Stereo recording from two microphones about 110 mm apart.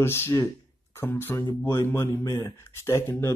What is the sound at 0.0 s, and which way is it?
Speech, 25° left (ahead or behind).